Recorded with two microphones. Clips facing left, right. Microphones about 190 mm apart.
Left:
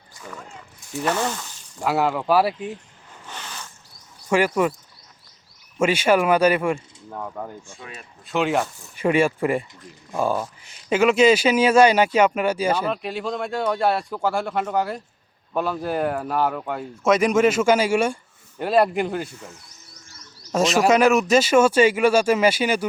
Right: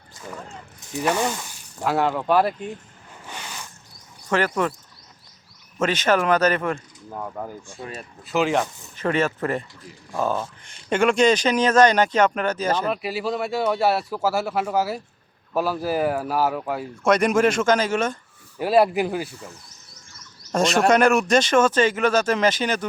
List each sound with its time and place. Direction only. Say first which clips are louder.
1.0 s speech: right 1 dB; 15° right (ahead or behind)
1.8 s speech: even; centre (ahead or behind)
3.2 s a sound: even; 10° right (ahead or behind)
4.3 s speech: left 3 dB; 10° left (ahead or behind)
5.8 s speech: left 2 dB; 10° left (ahead or behind)
7.1 s speech: even; 5° right (ahead or behind)
7.8 s speech: right 5 dB; 40° right (ahead or behind)
8.3 s speech: even; centre (ahead or behind)
9.0 s speech: left 3 dB; 10° left (ahead or behind)
12.9 s speech: right 1 dB; 5° right (ahead or behind)
18.6 s speech: right 1 dB; 5° right (ahead or behind)
20.5 s speech: even; centre (ahead or behind)